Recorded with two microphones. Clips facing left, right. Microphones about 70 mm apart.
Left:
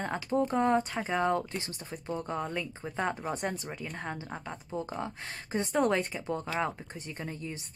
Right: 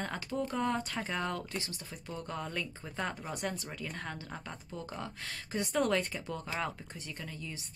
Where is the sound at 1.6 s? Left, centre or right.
Left.